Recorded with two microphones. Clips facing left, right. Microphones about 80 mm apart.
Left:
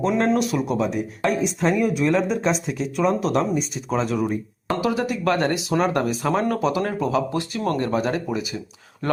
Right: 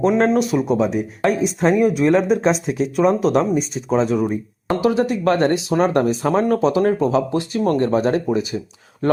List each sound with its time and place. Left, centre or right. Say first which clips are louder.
0.0 s speech: right 5 dB; right
0.5 s speech: right 4 dB; right
1.2 s speech: right 4 dB; right
3.8 s speech: right 5 dB; right